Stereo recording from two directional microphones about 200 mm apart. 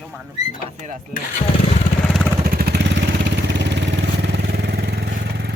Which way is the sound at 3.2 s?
60° right (ahead or behind).